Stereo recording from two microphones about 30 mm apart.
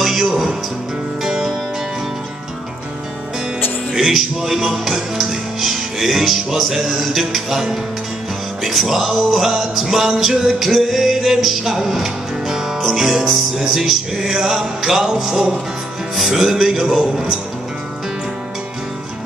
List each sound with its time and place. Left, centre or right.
0.0 s music: centre
3.9 s music: centre